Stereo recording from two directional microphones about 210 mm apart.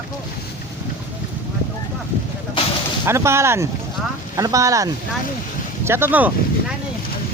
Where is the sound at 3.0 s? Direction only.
10° right (ahead or behind).